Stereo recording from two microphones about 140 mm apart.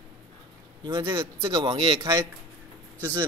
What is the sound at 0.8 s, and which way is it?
A man's voice, 30° right (ahead or behind).